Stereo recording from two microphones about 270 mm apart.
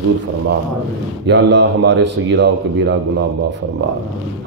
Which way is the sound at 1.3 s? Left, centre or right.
Right.